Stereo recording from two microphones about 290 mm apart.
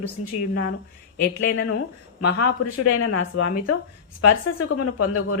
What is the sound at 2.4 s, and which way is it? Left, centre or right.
Speech, left.